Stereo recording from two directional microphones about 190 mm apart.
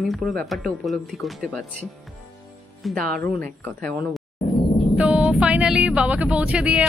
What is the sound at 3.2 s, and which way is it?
Speech, 10° left (ahead or behind).